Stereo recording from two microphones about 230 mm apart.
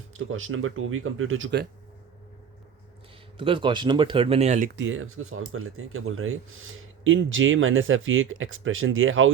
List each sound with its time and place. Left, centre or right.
0.1 s speech: right
3.3 s speech: right
4.8 s speech: right